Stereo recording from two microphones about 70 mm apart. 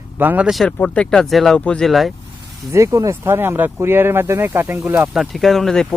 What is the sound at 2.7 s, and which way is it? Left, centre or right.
Speech, right.